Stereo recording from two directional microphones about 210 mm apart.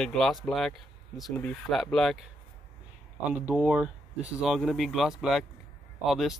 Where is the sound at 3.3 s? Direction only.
5° right (ahead or behind).